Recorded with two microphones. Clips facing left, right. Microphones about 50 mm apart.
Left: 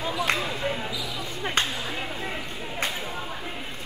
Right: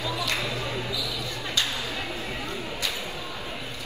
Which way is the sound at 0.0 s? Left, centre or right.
Left.